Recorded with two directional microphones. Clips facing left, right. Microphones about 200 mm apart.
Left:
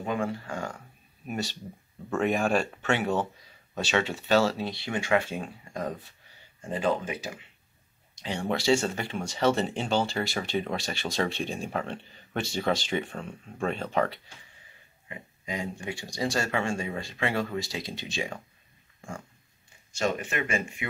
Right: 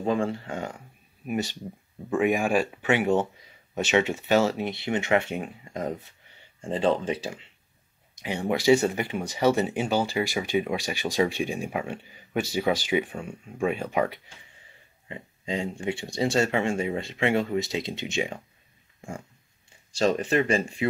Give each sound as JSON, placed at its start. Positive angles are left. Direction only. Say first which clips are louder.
{"t": 0.0, "sound": "speech", "louder": "right 4 dB", "side_deg": -30}
{"t": 8.2, "sound": "speech", "louder": "right 3 dB", "side_deg": -15}
{"t": 15.0, "sound": "speech", "louder": "right 5 dB", "side_deg": -30}
{"t": 18.9, "sound": "dog", "louder": "right 2 dB", "side_deg": -20}
{"t": 19.9, "sound": "speech", "louder": "right 6 dB", "side_deg": -35}